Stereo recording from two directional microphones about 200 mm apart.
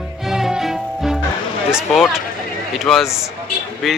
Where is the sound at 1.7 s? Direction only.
Centre (ahead or behind).